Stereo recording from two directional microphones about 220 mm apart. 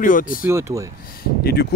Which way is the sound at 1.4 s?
45° left (ahead or behind).